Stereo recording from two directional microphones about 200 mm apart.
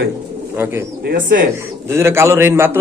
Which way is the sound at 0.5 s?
10° right (ahead or behind).